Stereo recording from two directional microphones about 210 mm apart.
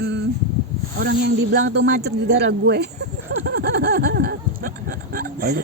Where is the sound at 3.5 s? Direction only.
50° right (ahead or behind).